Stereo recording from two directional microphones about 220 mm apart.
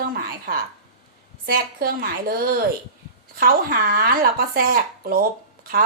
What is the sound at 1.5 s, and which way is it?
Speech, 45° right (ahead or behind).